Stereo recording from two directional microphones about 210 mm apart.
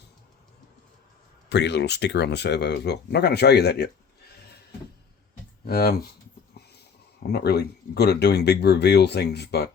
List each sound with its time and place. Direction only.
1.5 s speech: 55° left (ahead or behind)
5.6 s speech: 45° left (ahead or behind)
7.2 s speech: 50° left (ahead or behind)